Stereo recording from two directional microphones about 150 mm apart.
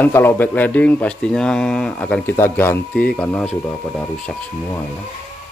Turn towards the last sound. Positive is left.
turn(degrees=10)  # may be behind; listen again after turning